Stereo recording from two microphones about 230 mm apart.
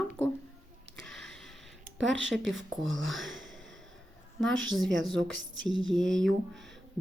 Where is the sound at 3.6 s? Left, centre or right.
Right.